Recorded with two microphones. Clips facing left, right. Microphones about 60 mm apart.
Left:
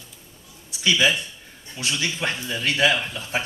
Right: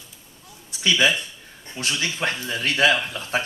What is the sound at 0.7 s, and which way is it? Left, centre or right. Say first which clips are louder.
A man's voice: even; right.